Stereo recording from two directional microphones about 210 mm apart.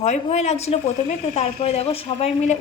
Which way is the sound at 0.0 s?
30° left (ahead or behind).